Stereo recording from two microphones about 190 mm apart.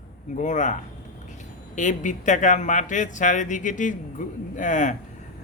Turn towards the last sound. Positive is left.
turn(degrees=40)  # may be behind; listen again after turning